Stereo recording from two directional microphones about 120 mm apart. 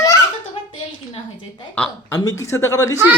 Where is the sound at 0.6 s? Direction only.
50° left (ahead or behind).